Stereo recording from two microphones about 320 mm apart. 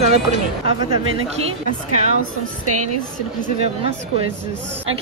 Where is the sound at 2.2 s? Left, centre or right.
Right.